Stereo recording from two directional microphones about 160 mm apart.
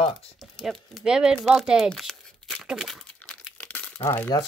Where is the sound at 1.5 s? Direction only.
5° right (ahead or behind).